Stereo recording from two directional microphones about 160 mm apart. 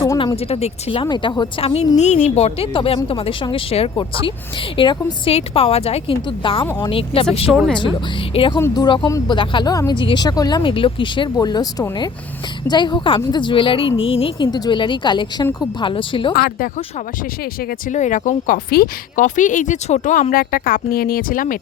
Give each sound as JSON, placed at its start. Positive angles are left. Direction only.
{"t": 0.0, "sound": "a sound", "side_deg": 25}
{"t": 0.3, "sound": "a woman's voice", "side_deg": 40}
{"t": 2.0, "sound": "a woman's voice", "side_deg": 45}
{"t": 8.5, "sound": "a woman's voice", "side_deg": 20}
{"t": 16.3, "sound": "a woman's voice", "side_deg": 65}
{"t": 17.9, "sound": "a woman's voice", "side_deg": 50}